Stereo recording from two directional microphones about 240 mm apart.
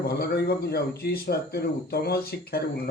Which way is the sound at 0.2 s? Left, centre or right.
Left.